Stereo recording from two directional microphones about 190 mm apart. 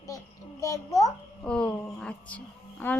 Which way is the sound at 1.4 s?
5° left (ahead or behind).